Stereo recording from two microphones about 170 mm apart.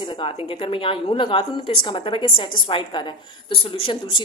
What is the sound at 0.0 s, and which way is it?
A woman's voice, 30° left (ahead or behind).